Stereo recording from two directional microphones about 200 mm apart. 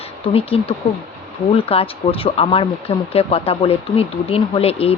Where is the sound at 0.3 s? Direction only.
30° left (ahead or behind).